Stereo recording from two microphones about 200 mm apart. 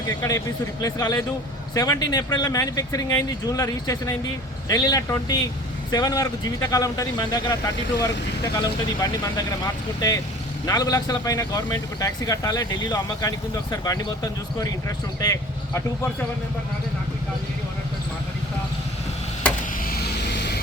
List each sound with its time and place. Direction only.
0.2 s speech: 15° left (ahead or behind)
10.7 s speech: 15° left (ahead or behind)
19.8 s vehicle: 50° left (ahead or behind)